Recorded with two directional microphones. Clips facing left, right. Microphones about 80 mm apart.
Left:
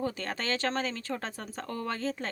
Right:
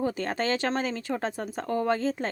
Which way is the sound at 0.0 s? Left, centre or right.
Right.